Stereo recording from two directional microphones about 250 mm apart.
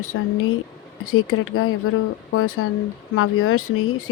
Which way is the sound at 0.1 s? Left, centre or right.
Left.